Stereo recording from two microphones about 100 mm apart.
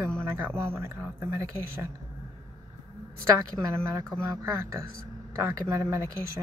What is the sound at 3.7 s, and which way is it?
Speech, 35° right (ahead or behind).